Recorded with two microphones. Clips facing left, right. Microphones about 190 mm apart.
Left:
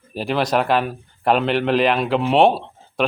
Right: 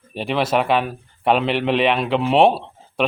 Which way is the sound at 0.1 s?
Centre (ahead or behind).